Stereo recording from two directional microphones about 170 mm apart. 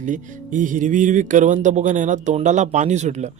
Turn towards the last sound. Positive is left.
turn(degrees=-45)  # may be behind; listen again after turning